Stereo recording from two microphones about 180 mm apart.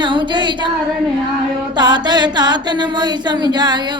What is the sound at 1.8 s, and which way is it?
A woman's voice, 25° right (ahead or behind).